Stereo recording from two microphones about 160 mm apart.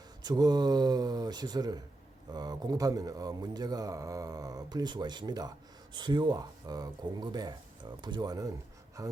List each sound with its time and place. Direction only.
0.2 s speech: 25° right (ahead or behind)